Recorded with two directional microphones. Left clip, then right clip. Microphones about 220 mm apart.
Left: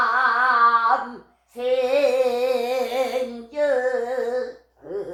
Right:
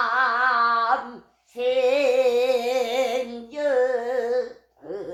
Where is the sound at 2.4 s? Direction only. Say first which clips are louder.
Right 1 dB; 40° right (ahead or behind).